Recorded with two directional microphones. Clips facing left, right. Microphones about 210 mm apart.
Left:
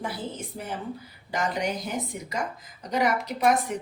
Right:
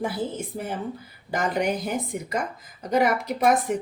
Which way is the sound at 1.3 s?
55° right (ahead or behind).